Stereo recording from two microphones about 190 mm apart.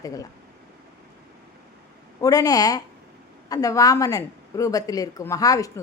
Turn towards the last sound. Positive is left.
turn(degrees=20)  # may be behind; listen again after turning